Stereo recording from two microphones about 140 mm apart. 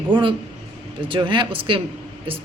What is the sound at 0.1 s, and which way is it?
A woman's voice, 35° right (ahead or behind).